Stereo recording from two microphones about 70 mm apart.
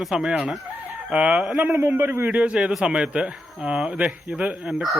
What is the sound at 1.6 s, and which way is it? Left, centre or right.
Speech, right.